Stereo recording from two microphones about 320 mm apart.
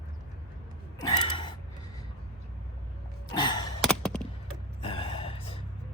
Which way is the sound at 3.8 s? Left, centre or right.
Centre.